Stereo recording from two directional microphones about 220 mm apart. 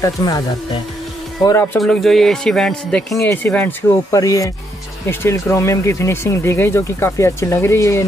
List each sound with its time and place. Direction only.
0.0 s a man's voice: 15° left (ahead or behind)
1.4 s a man's voice: 15° left (ahead or behind)